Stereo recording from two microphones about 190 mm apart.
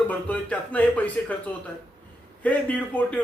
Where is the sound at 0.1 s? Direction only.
5° left (ahead or behind).